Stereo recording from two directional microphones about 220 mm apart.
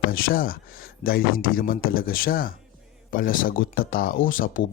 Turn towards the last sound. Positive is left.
turn(degrees=40)  # may be behind; listen again after turning